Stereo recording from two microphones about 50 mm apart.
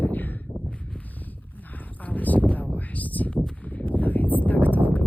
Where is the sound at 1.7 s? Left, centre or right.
Left.